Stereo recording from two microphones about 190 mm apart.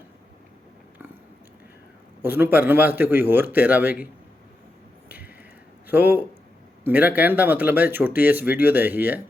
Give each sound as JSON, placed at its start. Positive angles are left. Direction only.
{"t": 2.2, "sound": "speech", "side_deg": -10}
{"t": 5.0, "sound": "a sound", "side_deg": -10}
{"t": 5.9, "sound": "speech", "side_deg": -10}